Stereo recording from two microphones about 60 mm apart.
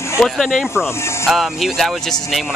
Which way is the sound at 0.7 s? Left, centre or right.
Left.